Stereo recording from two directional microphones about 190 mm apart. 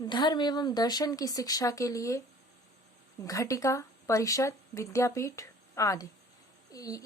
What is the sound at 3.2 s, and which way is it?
Speech, 15° left (ahead or behind).